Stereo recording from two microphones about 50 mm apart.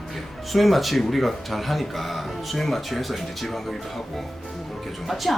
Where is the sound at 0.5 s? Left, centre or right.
Centre.